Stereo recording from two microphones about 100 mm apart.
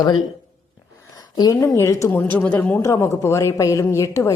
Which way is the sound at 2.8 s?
30° left (ahead or behind).